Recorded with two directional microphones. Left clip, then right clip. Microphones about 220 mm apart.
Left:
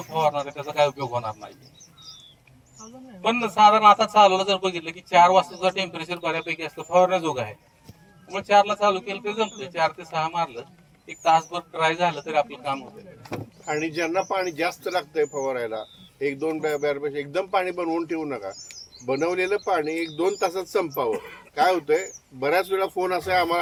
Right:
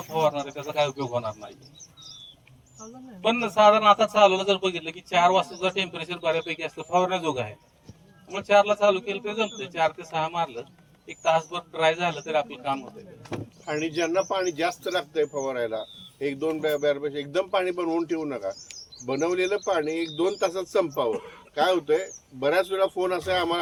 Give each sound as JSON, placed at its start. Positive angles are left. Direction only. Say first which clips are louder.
{"t": 0.1, "sound": "a man's voice", "louder": "left 1 dB", "side_deg": 30}
{"t": 3.2, "sound": "a man's voice", "louder": "left 2 dB", "side_deg": 30}
{"t": 13.3, "sound": "speech", "louder": "left 2 dB", "side_deg": -5}
{"t": 21.1, "sound": "a man's voice", "louder": "left 2 dB", "side_deg": 25}
{"t": 21.5, "sound": "speech", "louder": "left 2 dB", "side_deg": 5}